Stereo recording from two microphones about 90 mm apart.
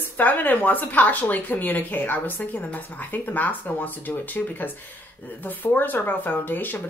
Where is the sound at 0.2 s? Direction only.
20° left (ahead or behind).